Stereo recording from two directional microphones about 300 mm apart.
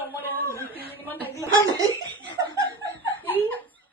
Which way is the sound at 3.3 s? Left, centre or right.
Centre.